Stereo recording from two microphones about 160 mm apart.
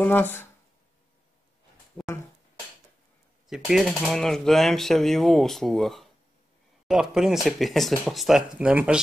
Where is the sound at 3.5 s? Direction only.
Centre (ahead or behind).